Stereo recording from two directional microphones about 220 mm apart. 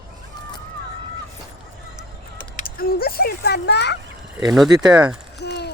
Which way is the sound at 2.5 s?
40° left (ahead or behind).